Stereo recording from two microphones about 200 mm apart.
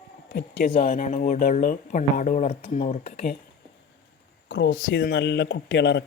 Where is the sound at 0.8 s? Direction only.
45° left (ahead or behind).